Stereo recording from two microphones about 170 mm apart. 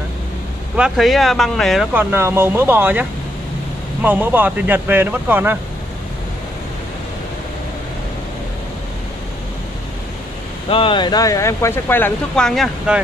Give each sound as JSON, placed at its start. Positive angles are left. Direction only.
{"t": 0.7, "sound": "speech", "side_deg": -5}
{"t": 2.0, "sound": "speech", "side_deg": -15}
{"t": 10.7, "sound": "speech", "side_deg": 30}